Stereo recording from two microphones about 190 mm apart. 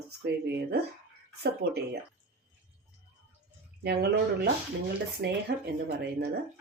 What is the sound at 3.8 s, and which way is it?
Speech, 60° right (ahead or behind).